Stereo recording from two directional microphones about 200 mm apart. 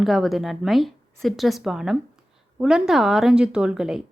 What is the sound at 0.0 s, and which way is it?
A woman's voice, centre (ahead or behind).